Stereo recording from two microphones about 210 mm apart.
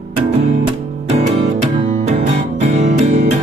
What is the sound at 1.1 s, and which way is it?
Music, 30° right (ahead or behind).